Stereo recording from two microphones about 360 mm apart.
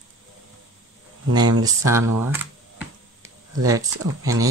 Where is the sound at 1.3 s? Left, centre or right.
Centre.